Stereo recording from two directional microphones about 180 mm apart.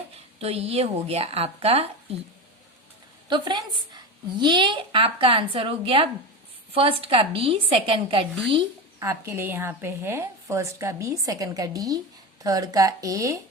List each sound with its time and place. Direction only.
0.3 s speech: 35° right (ahead or behind)
3.2 s speech: 25° right (ahead or behind)
9.0 s a woman's voice: 15° right (ahead or behind)